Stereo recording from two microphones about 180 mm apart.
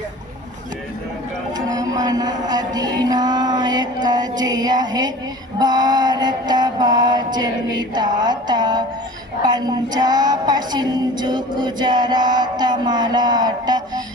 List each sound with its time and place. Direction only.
1.5 s music: 20° right (ahead or behind)